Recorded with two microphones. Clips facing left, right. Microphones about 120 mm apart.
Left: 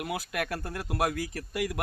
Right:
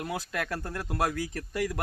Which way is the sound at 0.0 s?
10° left (ahead or behind).